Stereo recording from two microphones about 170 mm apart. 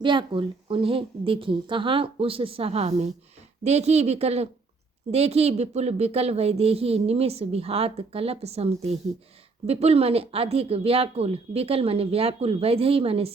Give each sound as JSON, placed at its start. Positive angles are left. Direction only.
{"t": 0.0, "sound": "speech", "side_deg": -30}